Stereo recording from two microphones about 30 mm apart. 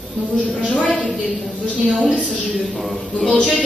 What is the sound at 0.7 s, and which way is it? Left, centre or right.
Speech, left.